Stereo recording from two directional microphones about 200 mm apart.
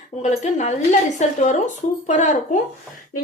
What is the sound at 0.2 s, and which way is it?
A woman's voice, 35° left (ahead or behind).